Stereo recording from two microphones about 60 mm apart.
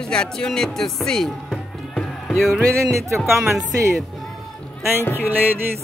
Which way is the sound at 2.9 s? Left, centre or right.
Right.